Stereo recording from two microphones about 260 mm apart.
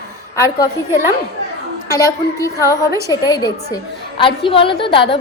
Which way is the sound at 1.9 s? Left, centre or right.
Centre.